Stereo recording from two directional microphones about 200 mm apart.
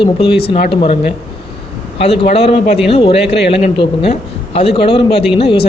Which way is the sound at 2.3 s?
30° left (ahead or behind).